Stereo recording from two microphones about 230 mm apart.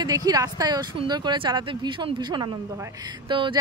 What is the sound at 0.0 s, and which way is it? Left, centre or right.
Speech, centre.